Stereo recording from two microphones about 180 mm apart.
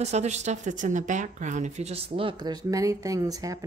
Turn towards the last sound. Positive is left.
turn(degrees=-20)  # may be behind; listen again after turning